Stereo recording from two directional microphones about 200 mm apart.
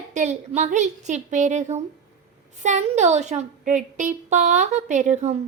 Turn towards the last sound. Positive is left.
turn(degrees=-35)  # may be behind; listen again after turning